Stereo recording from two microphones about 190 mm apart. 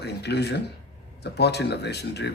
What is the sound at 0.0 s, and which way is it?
Speech, 60° left (ahead or behind).